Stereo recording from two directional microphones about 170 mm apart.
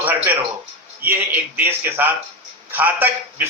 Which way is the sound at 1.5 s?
10° right (ahead or behind).